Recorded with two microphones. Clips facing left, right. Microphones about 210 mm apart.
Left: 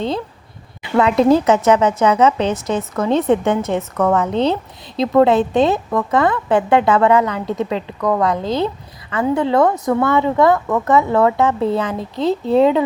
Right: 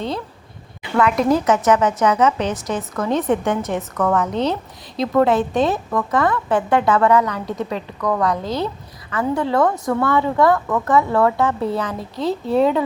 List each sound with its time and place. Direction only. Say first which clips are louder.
0.9 s a woman's voice: left 4 dB; 30° left (ahead or behind)